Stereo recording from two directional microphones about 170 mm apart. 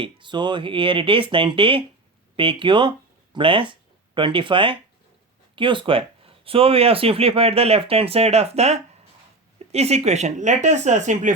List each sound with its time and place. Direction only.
0.0 s speech: 30° right (ahead or behind); by 11.3 s 45° right (ahead or behind)